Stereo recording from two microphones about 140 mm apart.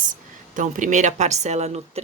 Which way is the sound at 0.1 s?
65° right (ahead or behind).